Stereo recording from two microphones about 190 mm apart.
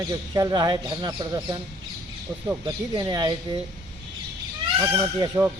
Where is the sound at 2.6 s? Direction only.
20° right (ahead or behind).